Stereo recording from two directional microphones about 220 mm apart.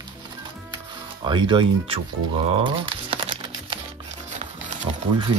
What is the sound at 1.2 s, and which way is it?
Speech, 20° right (ahead or behind).